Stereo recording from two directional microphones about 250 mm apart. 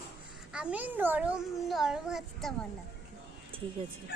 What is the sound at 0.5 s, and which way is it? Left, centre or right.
A child's voice, centre.